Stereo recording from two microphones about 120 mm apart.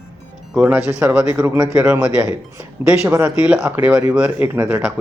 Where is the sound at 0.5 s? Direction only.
15° right (ahead or behind).